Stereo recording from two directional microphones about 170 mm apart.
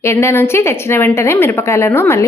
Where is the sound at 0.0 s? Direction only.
15° left (ahead or behind).